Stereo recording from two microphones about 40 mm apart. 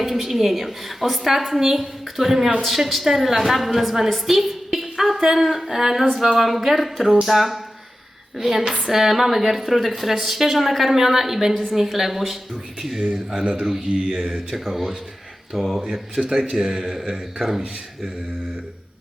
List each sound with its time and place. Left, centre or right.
0.0 s a woman's voice: centre
13.4 s a man's voice: right
13.9 s a woman's voice: centre
16.2 s a woman's voice: centre